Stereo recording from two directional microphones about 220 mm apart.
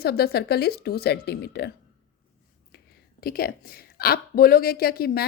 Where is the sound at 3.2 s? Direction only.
45° left (ahead or behind).